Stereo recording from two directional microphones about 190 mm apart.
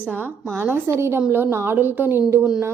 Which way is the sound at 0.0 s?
10° right (ahead or behind).